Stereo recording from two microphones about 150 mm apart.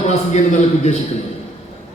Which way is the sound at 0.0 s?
50° left (ahead or behind).